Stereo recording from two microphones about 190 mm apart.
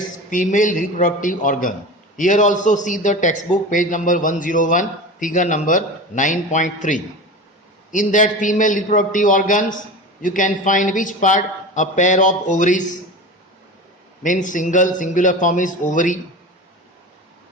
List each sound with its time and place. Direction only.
0.3 s a man's voice: 45° left (ahead or behind)
14.2 s a man's voice: 45° left (ahead or behind)